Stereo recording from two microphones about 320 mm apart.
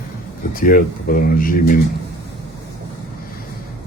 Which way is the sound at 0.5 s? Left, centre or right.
Left.